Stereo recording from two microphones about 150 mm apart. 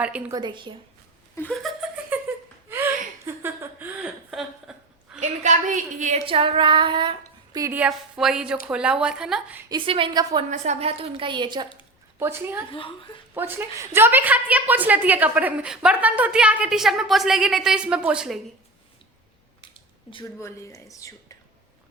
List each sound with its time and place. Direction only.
0.0 s a woman's voice: 10° right (ahead or behind)
0.3 s child singing: 30° right (ahead or behind)
1.4 s a woman's voice: 5° left (ahead or behind)
2.3 s laughter: 10° right (ahead or behind)
2.6 s a sound: 15° right (ahead or behind)
4.3 s a sound: centre (ahead or behind)
5.2 s a woman's voice: 55° right (ahead or behind)
6.2 s child singing: 35° right (ahead or behind)
7.7 s a woman's voice: 10° right (ahead or behind)
9.6 s child singing: 35° right (ahead or behind)
10.5 s child singing: 50° right (ahead or behind); by 11.7 s 30° right (ahead or behind)
12.2 s a woman's voice: 15° right (ahead or behind)
19.6 s a sound: 35° left (ahead or behind)
20.4 s speech: 20° left (ahead or behind)